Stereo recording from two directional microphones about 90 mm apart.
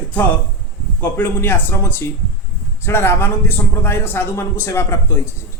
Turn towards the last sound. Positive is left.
turn(degrees=30)  # may be behind; listen again after turning